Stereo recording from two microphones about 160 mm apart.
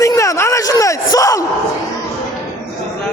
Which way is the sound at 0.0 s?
20° left (ahead or behind).